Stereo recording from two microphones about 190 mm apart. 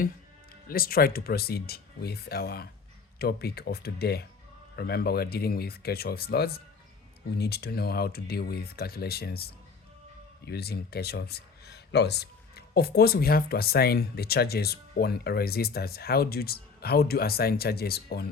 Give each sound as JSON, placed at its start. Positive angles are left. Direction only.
{"t": 0.7, "sound": "speech", "side_deg": 50}